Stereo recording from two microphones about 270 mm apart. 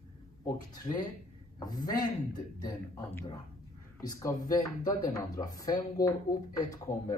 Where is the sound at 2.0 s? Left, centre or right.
Centre.